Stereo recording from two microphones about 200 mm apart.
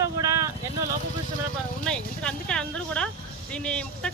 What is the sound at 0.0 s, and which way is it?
Vehicle, 15° right (ahead or behind).